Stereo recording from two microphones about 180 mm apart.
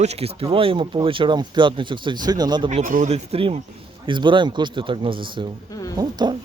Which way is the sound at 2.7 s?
45° right (ahead or behind).